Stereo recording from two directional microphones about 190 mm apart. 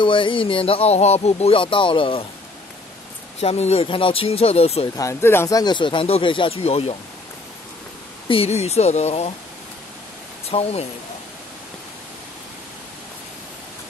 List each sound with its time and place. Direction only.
0.0 s speech: 25° left (ahead or behind)
3.3 s speech: 35° left (ahead or behind)
4.9 s speech: 15° left (ahead or behind); by 7.0 s 35° left (ahead or behind)
8.3 s speech: 35° left (ahead or behind)
10.5 s speech: 35° left (ahead or behind)